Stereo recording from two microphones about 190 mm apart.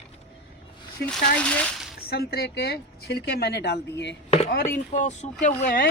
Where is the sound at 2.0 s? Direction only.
55° left (ahead or behind).